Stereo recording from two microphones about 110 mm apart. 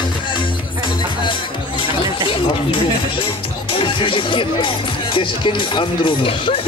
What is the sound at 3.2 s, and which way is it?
Music, 50° left (ahead or behind).